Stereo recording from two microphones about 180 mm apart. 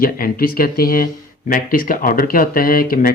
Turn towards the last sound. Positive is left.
turn(degrees=50)  # may be behind; listen again after turning